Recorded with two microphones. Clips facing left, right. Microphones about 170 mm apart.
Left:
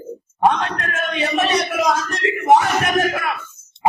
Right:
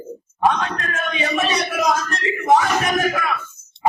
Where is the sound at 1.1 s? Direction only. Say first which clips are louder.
Left 2 dB; 65° left (ahead or behind).